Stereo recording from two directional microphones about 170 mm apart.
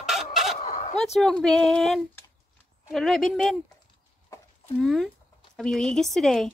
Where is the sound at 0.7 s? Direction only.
40° left (ahead or behind).